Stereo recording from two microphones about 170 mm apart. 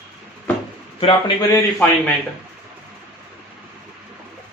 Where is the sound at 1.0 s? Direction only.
30° left (ahead or behind).